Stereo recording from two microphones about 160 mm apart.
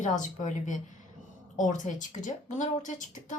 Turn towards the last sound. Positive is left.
turn(degrees=50)  # may be behind; listen again after turning